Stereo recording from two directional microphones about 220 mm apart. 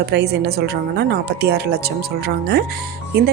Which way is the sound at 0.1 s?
50° right (ahead or behind).